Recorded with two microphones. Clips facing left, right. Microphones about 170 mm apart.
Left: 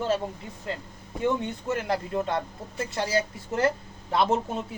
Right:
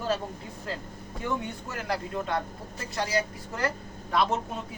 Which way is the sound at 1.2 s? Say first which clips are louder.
Left 6 dB; 25° left (ahead or behind).